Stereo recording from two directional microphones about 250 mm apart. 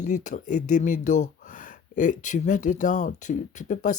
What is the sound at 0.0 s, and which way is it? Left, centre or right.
Speech, left.